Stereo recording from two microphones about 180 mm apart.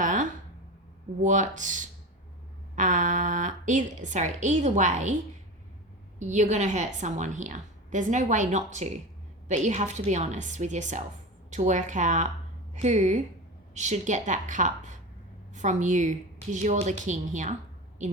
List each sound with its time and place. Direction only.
0.0 s a sound: 45° right (ahead or behind)
1.2 s speech: 45° right (ahead or behind)
6.1 s a woman's voice: 40° right (ahead or behind)